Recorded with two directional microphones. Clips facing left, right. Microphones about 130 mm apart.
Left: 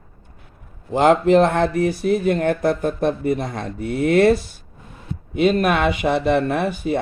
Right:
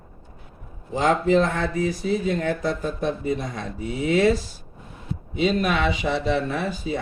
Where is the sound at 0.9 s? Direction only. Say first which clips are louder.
Left 5 dB; 65° left (ahead or behind).